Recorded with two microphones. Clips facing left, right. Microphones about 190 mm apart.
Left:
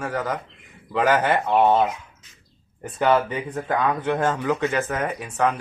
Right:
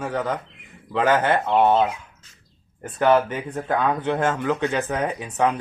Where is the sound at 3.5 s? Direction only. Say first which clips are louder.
Right 1 dB; 10° right (ahead or behind).